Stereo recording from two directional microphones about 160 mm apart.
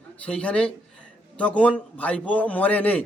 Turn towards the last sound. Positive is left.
turn(degrees=10)  # may be behind; listen again after turning